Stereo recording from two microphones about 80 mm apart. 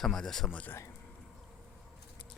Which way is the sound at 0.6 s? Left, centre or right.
Left.